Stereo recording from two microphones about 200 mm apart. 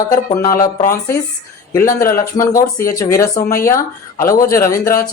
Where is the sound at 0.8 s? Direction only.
45° left (ahead or behind).